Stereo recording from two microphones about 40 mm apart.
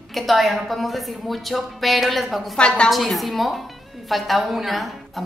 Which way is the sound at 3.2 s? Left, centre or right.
Centre.